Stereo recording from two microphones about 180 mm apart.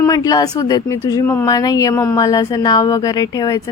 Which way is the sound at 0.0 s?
20° left (ahead or behind).